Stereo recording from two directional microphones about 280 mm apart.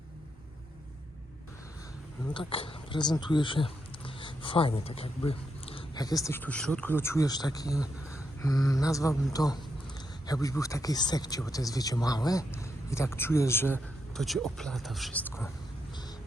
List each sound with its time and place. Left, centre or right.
2.3 s speech: centre